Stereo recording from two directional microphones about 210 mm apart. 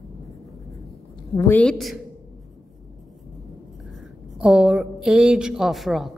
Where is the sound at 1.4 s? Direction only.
10° left (ahead or behind).